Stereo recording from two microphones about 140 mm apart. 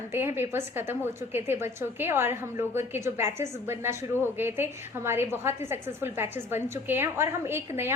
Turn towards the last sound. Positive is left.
turn(degrees=-15)  # may be behind; listen again after turning